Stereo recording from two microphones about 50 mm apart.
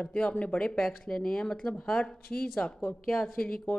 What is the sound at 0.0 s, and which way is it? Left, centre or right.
A woman's voice, left.